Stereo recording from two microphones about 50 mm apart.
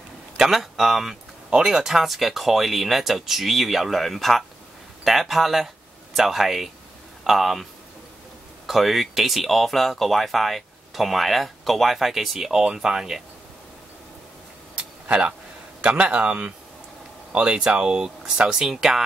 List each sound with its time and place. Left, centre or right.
0.4 s speech: centre
8.6 s speech: centre
14.8 s a sound: right
15.8 s a man's voice: right